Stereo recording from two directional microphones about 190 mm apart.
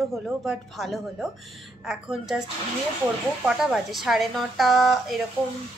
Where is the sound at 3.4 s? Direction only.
Centre (ahead or behind).